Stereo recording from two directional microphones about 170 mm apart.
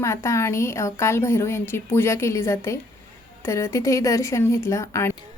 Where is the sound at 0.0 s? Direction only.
15° left (ahead or behind).